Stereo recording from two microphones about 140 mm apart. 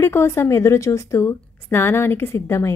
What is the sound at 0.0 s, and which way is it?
A woman's voice, 20° left (ahead or behind).